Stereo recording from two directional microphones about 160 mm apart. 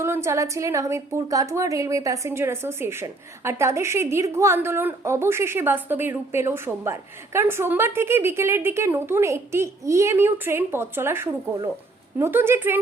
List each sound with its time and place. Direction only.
0.0 s a woman's voice: 15° right (ahead or behind)